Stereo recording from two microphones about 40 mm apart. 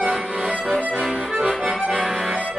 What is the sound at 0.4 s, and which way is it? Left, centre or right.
Accordion, centre.